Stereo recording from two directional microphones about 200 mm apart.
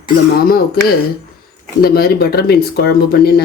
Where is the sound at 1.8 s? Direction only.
50° left (ahead or behind).